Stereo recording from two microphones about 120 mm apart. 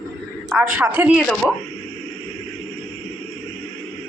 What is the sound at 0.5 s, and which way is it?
Speech, 15° right (ahead or behind).